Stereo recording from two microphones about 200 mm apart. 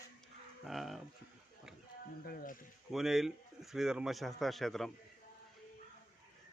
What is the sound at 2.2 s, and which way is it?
Speech, 40° left (ahead or behind).